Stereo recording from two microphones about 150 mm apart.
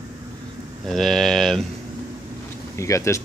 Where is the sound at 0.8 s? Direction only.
Centre (ahead or behind).